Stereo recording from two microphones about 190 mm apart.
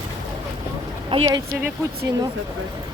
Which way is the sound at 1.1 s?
25° right (ahead or behind).